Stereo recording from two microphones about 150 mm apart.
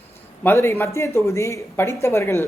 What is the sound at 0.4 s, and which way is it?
A man's voice, 15° left (ahead or behind).